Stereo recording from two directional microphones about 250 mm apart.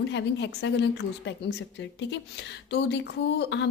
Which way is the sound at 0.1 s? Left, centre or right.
Left.